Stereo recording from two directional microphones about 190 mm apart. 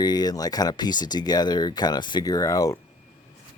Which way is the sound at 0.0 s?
20° left (ahead or behind).